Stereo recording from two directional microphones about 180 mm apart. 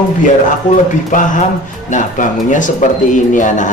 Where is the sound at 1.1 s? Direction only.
45° left (ahead or behind).